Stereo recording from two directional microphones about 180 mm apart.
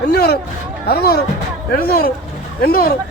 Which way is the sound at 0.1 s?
60° left (ahead or behind).